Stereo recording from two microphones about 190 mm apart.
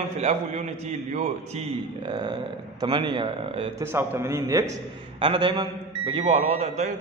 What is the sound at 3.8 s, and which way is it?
A man's voice, 10° right (ahead or behind).